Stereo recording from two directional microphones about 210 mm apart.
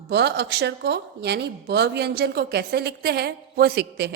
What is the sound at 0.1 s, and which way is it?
A woman's voice, 55° right (ahead or behind).